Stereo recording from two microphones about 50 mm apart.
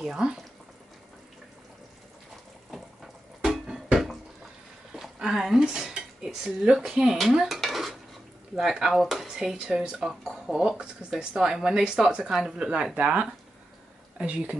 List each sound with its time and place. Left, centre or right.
0.0 s speech: centre
2.7 s music: centre
3.6 s a sound: centre
5.0 s cutlery: centre
9.0 s speech: centre
9.3 s speech: centre
12.2 s speech: centre
12.9 s speech: right